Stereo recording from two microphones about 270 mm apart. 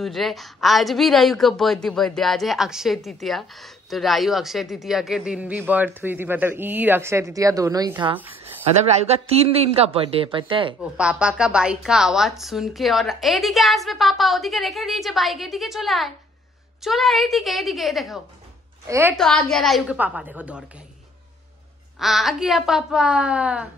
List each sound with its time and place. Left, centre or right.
0.0 s a woman's voice: centre
11.0 s a woman's voice: centre
19.4 s a woman's voice: centre
21.9 s a woman's voice: centre